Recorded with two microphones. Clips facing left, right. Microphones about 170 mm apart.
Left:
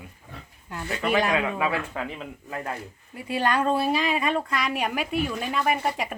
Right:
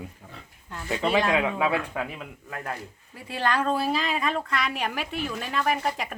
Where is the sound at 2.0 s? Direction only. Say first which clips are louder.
Right 1 dB; 5° right (ahead or behind).